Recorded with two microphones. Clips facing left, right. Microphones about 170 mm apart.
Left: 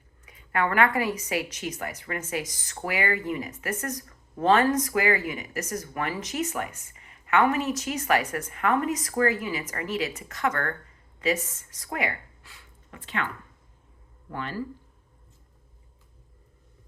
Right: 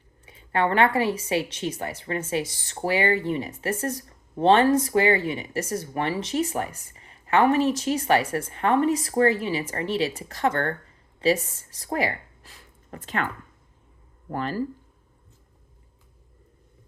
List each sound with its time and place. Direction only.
0.3 s speech: 30° right (ahead or behind)